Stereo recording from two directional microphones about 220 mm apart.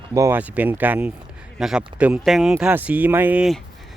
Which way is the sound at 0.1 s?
15° right (ahead or behind).